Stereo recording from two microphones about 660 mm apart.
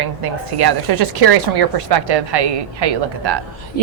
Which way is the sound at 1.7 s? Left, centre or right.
Right.